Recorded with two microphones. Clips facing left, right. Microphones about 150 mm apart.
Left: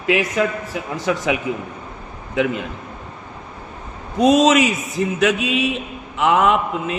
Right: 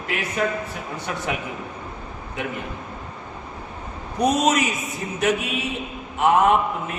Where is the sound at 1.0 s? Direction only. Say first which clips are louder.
Left 8 dB; 90° left.